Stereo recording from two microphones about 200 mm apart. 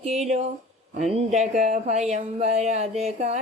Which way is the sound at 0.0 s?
30° right (ahead or behind).